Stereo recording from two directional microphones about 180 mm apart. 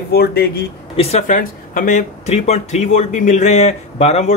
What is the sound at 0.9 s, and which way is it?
Speech, 40° left (ahead or behind).